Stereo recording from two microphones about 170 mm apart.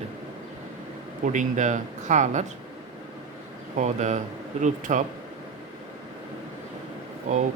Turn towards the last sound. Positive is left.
turn(degrees=-45)  # may be behind; listen again after turning